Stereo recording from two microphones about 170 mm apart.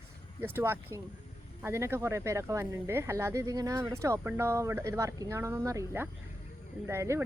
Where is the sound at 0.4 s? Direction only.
15° right (ahead or behind).